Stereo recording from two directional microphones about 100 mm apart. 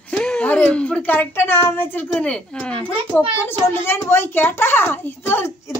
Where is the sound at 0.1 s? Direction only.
10° left (ahead or behind).